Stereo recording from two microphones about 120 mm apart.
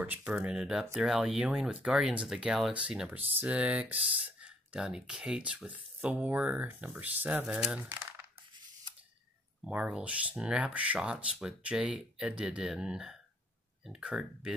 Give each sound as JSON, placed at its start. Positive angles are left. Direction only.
{"t": 0.0, "sound": "speech", "side_deg": -10}
{"t": 9.7, "sound": "speech", "side_deg": -10}